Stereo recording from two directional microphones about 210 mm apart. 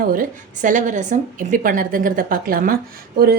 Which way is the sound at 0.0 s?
40° right (ahead or behind).